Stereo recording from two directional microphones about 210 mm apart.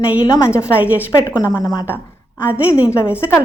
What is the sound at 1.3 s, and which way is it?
Speech, 20° left (ahead or behind).